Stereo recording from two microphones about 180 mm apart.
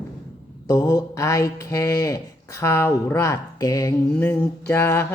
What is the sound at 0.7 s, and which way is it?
Speech, 20° left (ahead or behind).